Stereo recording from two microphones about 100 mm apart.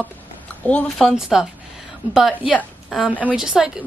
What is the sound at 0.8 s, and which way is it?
Speech, centre (ahead or behind).